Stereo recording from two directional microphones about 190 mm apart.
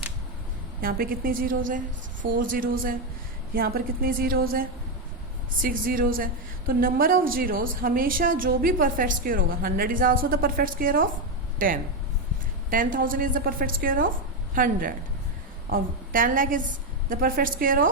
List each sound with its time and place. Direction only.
0.8 s a woman's voice: 50° right (ahead or behind)
5.6 s a woman's voice: 50° right (ahead or behind)
12.7 s a woman's voice: 45° right (ahead or behind)